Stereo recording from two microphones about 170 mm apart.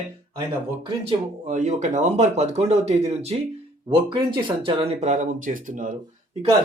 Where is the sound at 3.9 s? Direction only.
25° right (ahead or behind); by 5.9 s 50° right (ahead or behind).